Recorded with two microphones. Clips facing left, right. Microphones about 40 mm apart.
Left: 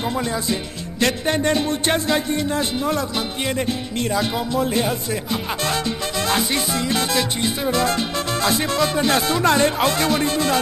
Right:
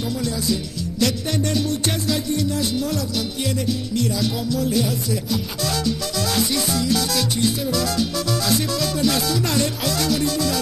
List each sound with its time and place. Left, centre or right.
0.5 s music: left